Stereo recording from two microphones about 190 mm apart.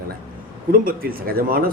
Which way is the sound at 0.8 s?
50° right (ahead or behind).